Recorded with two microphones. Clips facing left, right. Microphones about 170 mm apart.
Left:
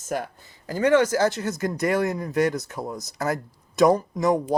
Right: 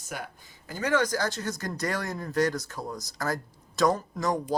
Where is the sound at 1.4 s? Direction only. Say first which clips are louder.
Left 7 dB; 20° left (ahead or behind).